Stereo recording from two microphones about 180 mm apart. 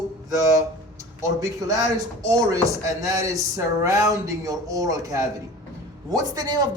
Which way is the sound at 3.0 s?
15° right (ahead or behind).